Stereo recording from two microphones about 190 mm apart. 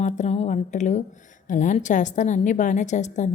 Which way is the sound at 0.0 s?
35° left (ahead or behind).